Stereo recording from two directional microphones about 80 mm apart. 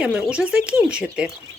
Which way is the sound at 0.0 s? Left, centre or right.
Centre.